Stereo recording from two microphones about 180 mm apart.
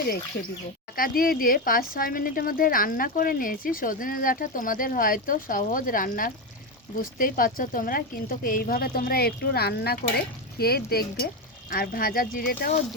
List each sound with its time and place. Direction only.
0.9 s speech: 55° left (ahead or behind)